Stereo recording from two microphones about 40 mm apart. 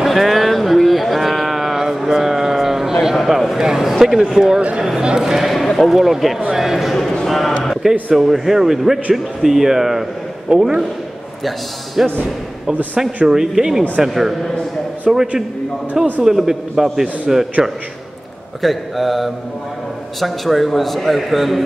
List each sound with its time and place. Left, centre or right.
0.0 s a sound: centre
4.2 s speech: centre
5.2 s a man's voice: centre
6.9 s a sound: centre
7.2 s a man's voice: centre
7.6 s a sound: centre
8.1 s a man's voice: centre
10.5 s speech: right
11.4 s a man's voice: centre
13.3 s a man's voice: centre
18.6 s a man's voice: centre